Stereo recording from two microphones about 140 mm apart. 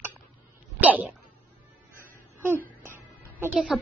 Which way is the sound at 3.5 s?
Centre (ahead or behind).